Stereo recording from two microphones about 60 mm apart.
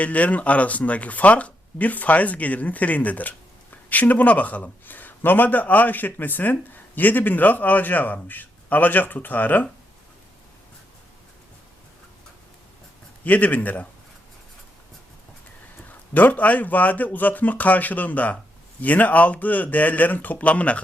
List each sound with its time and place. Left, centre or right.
0.0 s speech: left
13.2 s speech: left
16.1 s speech: left